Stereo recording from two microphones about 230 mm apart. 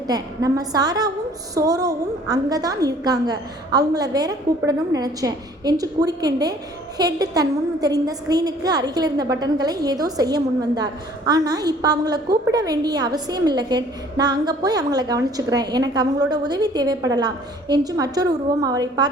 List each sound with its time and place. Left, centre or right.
0.1 s a woman's voice: centre